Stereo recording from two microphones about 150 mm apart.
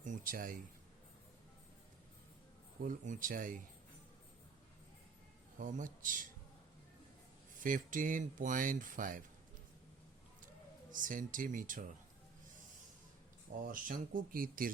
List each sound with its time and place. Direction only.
0.0 s a sound: 60° right (ahead or behind)
2.8 s speech: 60° right (ahead or behind)
5.5 s speech: 60° right (ahead or behind)
7.6 s speech: 60° right (ahead or behind)
10.9 s speech: 60° right (ahead or behind)
13.7 s speech: 65° right (ahead or behind)